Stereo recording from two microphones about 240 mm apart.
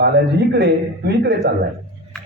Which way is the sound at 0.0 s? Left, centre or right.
Right.